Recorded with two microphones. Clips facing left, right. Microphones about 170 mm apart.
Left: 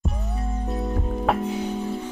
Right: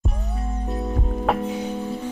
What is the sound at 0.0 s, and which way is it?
Music, centre (ahead or behind).